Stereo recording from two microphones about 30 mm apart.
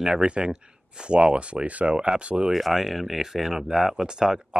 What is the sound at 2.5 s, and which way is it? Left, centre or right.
Speech, centre.